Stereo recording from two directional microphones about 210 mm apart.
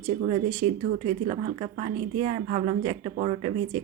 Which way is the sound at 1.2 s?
30° right (ahead or behind).